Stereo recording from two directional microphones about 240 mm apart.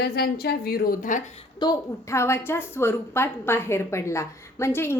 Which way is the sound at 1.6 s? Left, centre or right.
Centre.